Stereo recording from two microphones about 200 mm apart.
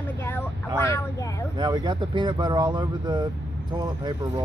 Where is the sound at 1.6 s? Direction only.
20° right (ahead or behind).